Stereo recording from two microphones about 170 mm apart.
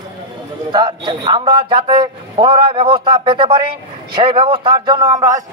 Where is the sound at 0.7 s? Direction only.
25° right (ahead or behind).